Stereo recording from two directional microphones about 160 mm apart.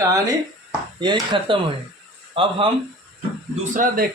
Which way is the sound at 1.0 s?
30° right (ahead or behind).